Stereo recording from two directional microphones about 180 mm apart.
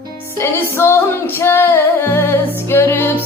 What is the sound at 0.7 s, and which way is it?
Music, 15° left (ahead or behind).